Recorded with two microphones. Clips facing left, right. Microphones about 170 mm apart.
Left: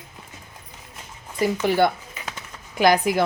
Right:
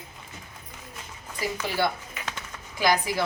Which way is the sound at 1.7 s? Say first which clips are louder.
Left 6 dB; 55° left (ahead or behind).